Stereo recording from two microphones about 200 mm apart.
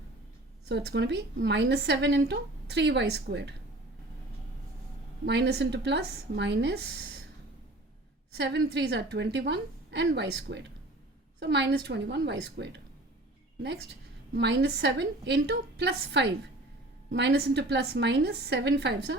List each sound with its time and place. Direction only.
0.7 s a woman's voice: 55° right (ahead or behind)
5.2 s a woman's voice: 60° right (ahead or behind)
8.4 s a woman's voice: 60° right (ahead or behind)
14.3 s a woman's voice: 60° right (ahead or behind)